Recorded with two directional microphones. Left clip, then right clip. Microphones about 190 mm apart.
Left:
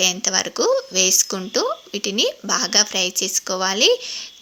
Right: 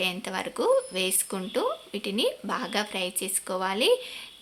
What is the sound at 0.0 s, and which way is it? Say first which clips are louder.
A woman's voice: left 10 dB; 20° left (ahead or behind).